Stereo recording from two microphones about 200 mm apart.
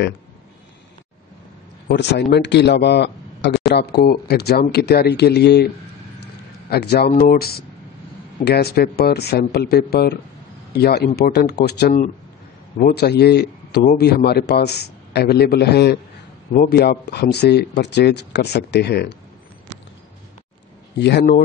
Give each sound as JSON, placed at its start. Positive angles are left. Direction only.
{"t": 1.9, "sound": "a man's voice", "side_deg": 60}
{"t": 6.7, "sound": "a man's voice", "side_deg": 55}
{"t": 21.0, "sound": "a man's voice", "side_deg": 60}